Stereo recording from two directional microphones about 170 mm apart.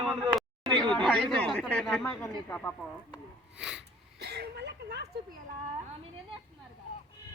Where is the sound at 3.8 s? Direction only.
75° right (ahead or behind).